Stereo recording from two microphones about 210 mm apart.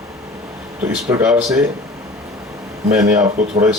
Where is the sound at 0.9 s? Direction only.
5° right (ahead or behind).